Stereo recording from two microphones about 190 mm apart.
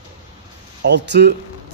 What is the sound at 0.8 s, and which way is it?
Speech, 65° right (ahead or behind).